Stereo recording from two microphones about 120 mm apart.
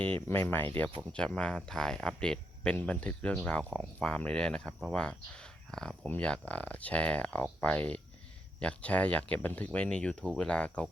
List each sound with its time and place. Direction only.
0.0 s speech: 20° left (ahead or behind)